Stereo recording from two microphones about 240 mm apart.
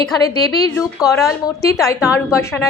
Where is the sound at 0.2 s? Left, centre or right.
Centre.